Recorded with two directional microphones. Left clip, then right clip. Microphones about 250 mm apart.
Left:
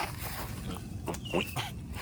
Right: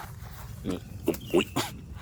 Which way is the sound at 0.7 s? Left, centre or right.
Right.